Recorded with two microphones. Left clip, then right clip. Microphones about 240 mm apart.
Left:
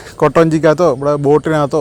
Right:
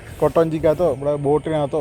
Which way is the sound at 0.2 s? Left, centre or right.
Left.